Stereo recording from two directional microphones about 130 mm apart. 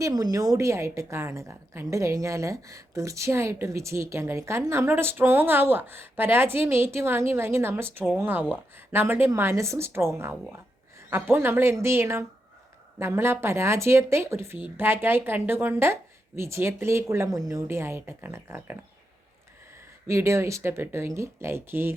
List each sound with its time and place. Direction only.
0.0 s a woman's voice: 30° right (ahead or behind)
20.1 s a woman's voice: 20° right (ahead or behind)